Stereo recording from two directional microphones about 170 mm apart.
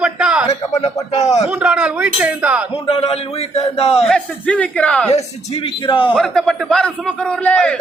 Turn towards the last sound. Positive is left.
turn(degrees=10)  # may be behind; listen again after turning